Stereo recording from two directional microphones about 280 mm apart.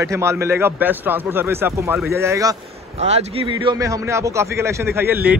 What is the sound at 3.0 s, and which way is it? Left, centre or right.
A man's voice, right.